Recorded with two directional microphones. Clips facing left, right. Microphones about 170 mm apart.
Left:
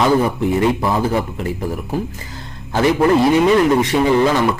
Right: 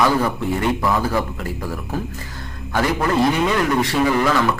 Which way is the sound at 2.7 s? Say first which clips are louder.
Left 6 dB; 25° left (ahead or behind).